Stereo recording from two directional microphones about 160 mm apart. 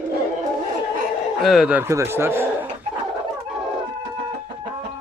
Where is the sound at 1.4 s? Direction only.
5° right (ahead or behind).